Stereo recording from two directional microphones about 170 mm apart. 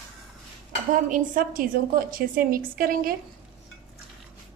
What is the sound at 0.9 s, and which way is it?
A woman's voice, 50° right (ahead or behind).